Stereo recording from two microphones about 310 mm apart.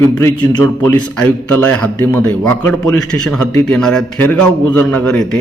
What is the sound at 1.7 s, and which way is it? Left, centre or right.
A man's voice, centre.